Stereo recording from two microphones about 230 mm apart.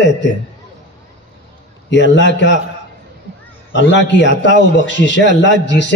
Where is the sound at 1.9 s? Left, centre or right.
Left.